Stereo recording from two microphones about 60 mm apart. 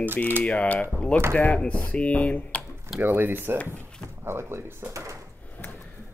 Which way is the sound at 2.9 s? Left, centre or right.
Right.